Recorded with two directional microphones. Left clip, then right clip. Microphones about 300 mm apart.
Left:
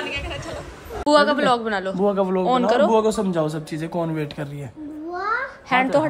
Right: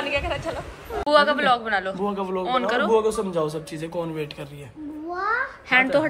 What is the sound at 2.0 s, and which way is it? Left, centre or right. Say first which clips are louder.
Speech: left 6 dB; left.